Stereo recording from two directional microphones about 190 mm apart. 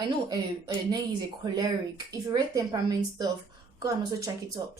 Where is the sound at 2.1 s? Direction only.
20° right (ahead or behind).